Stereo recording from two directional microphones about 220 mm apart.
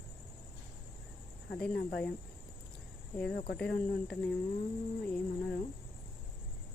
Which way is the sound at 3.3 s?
45° left (ahead or behind).